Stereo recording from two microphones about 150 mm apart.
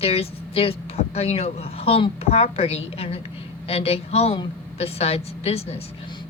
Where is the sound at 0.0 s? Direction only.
40° left (ahead or behind).